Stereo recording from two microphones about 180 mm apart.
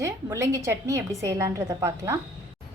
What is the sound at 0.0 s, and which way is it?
A woman's voice, 15° right (ahead or behind).